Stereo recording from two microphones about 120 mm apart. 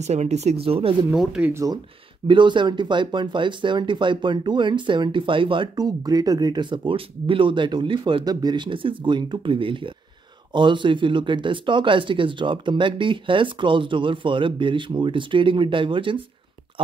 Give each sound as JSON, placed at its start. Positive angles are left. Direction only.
{"t": 0.0, "sound": "speech", "side_deg": -70}
{"t": 1.1, "sound": "speech", "side_deg": -5}
{"t": 1.5, "sound": "speech", "side_deg": -25}
{"t": 2.2, "sound": "speech", "side_deg": -40}